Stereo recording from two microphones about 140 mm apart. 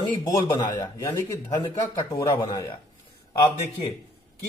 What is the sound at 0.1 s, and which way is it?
A man's voice, 30° left (ahead or behind).